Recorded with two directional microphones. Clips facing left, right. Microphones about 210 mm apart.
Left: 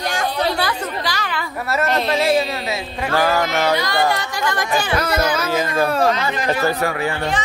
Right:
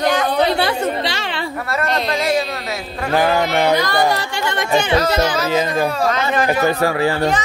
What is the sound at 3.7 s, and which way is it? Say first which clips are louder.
Carnatic music: right 3 dB; 45° right (ahead or behind).